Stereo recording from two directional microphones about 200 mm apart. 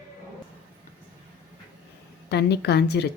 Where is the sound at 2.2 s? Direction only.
55° left (ahead or behind).